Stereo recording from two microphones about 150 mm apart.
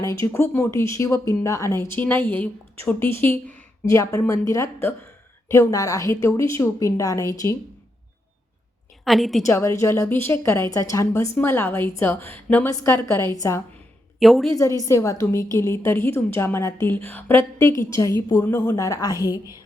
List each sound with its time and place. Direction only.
0.3 s a woman's voice: 15° left (ahead or behind)
9.0 s a woman's voice: centre (ahead or behind)
9.5 s a woman's voice: 20° left (ahead or behind)
14.2 s a woman's voice: centre (ahead or behind)
14.5 s a woman's voice: 20° left (ahead or behind)
19.1 s a woman's voice: 20° right (ahead or behind)